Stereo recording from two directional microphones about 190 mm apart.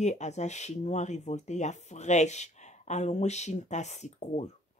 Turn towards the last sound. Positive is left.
turn(degrees=35)  # may be behind; listen again after turning